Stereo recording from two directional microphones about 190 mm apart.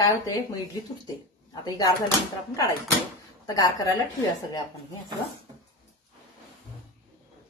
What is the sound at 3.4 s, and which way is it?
Speech, 20° left (ahead or behind).